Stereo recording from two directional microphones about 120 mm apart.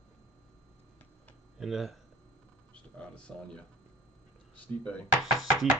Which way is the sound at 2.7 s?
10° left (ahead or behind).